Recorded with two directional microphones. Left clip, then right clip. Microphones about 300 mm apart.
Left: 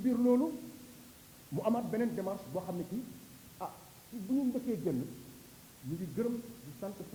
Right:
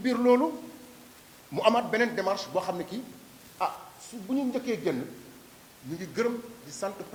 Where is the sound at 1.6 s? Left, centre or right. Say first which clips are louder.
Right 10 dB; centre.